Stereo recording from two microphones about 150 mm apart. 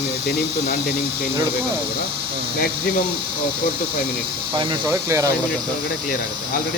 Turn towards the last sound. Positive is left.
turn(degrees=-20)  # may be behind; listen again after turning